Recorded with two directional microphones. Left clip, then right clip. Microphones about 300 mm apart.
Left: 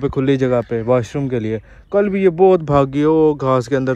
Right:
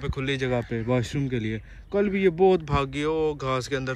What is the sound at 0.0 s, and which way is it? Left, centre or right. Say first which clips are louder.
Speech: left 11 dB; centre.